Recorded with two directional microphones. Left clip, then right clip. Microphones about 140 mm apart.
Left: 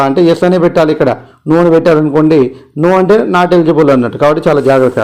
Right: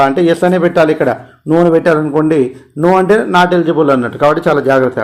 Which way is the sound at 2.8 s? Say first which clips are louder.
Left 2 dB; 10° left (ahead or behind).